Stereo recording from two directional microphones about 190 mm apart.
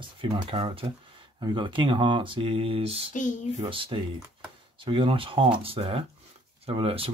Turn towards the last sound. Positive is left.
turn(degrees=-30)  # may be behind; listen again after turning